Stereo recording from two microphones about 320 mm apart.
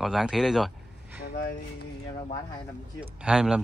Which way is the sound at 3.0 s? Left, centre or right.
Centre.